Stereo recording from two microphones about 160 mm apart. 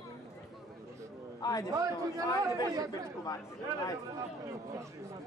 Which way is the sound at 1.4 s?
20° left (ahead or behind).